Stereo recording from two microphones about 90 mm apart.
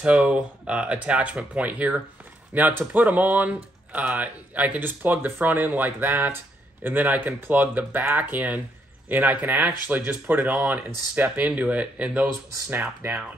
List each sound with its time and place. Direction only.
0.0 s speech: 15° right (ahead or behind)